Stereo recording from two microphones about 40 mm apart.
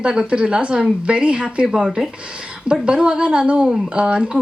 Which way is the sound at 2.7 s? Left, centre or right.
Right.